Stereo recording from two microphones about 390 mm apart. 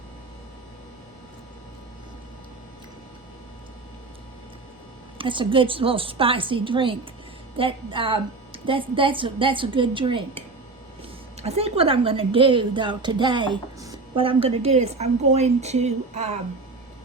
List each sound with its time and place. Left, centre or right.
5.1 s a woman's voice: centre